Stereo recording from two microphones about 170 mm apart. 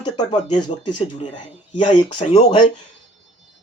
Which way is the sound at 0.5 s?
25° left (ahead or behind).